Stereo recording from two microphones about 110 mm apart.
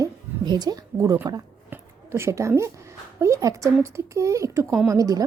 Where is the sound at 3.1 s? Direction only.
30° right (ahead or behind).